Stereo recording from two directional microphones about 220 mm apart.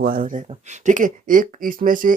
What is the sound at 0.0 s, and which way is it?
Speech, 40° right (ahead or behind).